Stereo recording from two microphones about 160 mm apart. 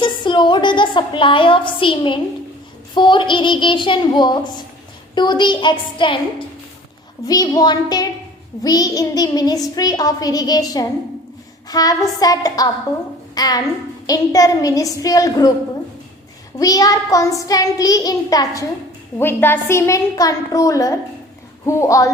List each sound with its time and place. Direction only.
0.0 s a woman's voice: 30° left (ahead or behind)
2.9 s child singing: 30° left (ahead or behind)
7.3 s child singing: 25° left (ahead or behind)
13.3 s a woman's voice: 25° left (ahead or behind)
14.1 s child singing: 20° left (ahead or behind)
16.6 s child singing: 20° left (ahead or behind)